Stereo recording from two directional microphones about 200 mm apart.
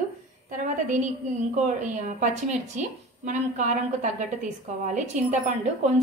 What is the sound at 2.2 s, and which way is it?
A woman's voice, 35° right (ahead or behind).